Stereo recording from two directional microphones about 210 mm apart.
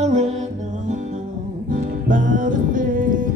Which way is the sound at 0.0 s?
35° right (ahead or behind).